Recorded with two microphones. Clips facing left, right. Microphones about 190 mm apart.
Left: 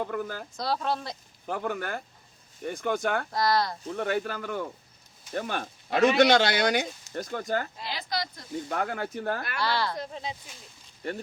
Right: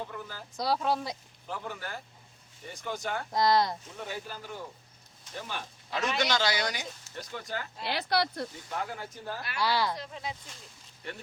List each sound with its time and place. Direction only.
0.0 s speech: 55° left (ahead or behind)
0.5 s speech: 10° right (ahead or behind)
1.5 s speech: 55° left (ahead or behind)
3.3 s speech: 20° right (ahead or behind)
3.8 s speech: 65° left (ahead or behind)
7.1 s speech: 50° left (ahead or behind)
7.9 s speech: 65° right (ahead or behind)
8.7 s speech: 60° left (ahead or behind)
9.6 s speech: 10° right (ahead or behind)
10.0 s speech: 35° left (ahead or behind)